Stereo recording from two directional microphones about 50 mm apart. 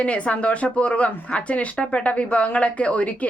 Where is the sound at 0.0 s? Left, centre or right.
Left.